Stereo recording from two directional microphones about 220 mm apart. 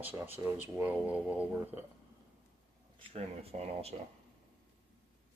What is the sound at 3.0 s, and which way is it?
Speech, 25° right (ahead or behind).